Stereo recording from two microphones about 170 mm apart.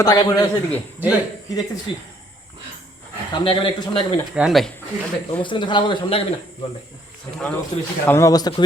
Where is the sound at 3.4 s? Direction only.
30° left (ahead or behind).